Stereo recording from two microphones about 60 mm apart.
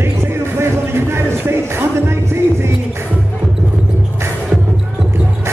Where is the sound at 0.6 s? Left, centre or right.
Right.